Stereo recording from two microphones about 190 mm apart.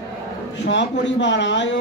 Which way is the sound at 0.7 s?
70° left (ahead or behind).